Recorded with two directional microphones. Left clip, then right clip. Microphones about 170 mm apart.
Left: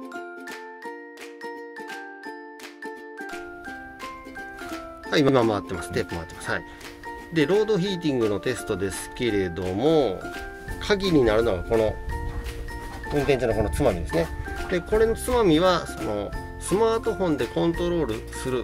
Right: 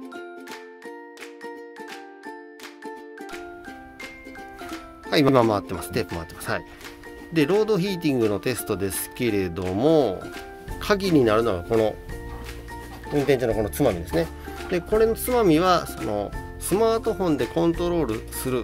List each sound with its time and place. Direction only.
5.1 s speech: 25° right (ahead or behind)
7.3 s speech: 30° right (ahead or behind)
13.1 s speech: 20° right (ahead or behind)